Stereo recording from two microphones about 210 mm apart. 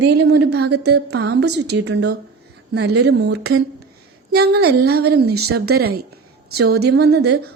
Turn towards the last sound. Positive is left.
turn(degrees=-50)  # may be behind; listen again after turning